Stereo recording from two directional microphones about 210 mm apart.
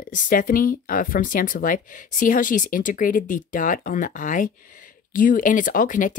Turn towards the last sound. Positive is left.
turn(degrees=40)  # may be behind; listen again after turning